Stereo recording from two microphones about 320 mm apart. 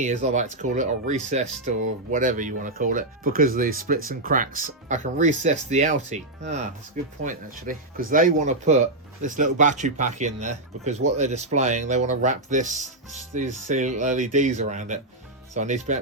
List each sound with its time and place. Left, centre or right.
0.0 s speech: right